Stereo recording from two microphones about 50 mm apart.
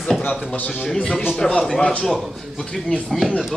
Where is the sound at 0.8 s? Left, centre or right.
Centre.